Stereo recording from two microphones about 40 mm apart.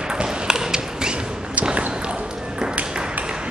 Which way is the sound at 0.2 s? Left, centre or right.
Centre.